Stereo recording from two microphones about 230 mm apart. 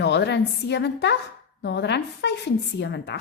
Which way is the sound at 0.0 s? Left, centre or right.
Left.